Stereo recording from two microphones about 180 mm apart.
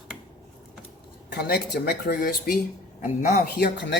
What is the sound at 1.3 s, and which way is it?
Speech, 65° left (ahead or behind).